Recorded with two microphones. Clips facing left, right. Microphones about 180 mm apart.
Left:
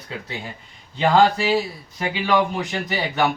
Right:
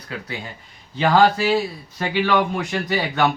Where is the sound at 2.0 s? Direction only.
15° left (ahead or behind).